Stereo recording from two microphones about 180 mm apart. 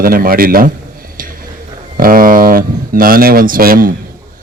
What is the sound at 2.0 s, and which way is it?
Speech, 50° right (ahead or behind).